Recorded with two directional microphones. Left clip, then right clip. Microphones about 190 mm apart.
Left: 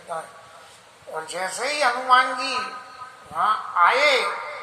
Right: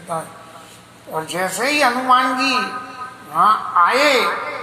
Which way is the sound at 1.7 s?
40° right (ahead or behind).